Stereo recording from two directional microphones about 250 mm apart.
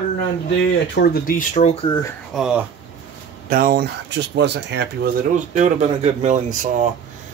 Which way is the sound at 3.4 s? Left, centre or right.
Right.